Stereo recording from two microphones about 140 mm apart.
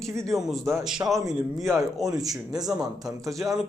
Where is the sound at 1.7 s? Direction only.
25° right (ahead or behind).